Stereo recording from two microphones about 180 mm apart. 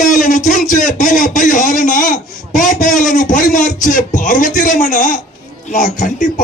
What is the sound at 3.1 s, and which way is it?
Speech, 45° left (ahead or behind).